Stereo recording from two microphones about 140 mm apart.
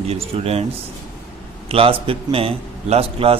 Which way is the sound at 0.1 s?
45° right (ahead or behind).